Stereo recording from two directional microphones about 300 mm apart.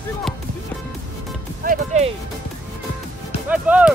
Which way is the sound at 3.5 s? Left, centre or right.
Centre.